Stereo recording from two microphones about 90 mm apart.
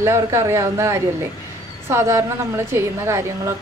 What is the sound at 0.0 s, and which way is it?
A woman's voice, 30° right (ahead or behind).